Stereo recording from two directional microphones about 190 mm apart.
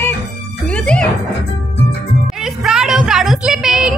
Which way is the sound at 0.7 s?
5° left (ahead or behind).